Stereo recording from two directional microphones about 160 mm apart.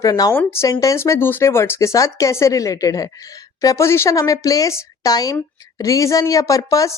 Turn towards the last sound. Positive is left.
turn(degrees=20)  # may be behind; listen again after turning